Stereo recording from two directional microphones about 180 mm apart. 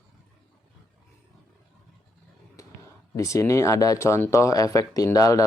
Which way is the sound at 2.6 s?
15° left (ahead or behind).